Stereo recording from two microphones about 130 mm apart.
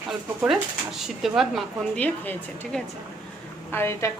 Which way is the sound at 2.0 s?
10° left (ahead or behind).